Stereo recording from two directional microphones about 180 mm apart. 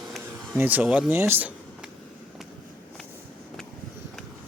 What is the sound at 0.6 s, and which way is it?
Speech, 10° right (ahead or behind).